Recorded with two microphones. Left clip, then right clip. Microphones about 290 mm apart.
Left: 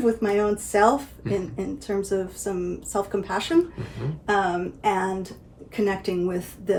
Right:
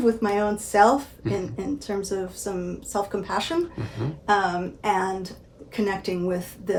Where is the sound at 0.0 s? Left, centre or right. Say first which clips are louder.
Even; centre.